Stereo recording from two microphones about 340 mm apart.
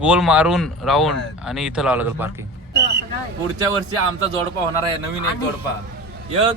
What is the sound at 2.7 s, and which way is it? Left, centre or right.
Speech, right.